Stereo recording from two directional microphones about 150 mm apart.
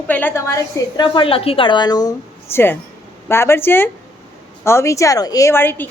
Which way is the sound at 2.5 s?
15° left (ahead or behind).